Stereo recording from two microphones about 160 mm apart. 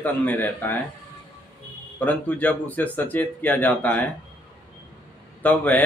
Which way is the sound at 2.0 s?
10° left (ahead or behind).